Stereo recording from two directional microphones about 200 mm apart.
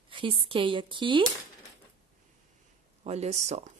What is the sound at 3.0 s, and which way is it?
Speech, 35° right (ahead or behind).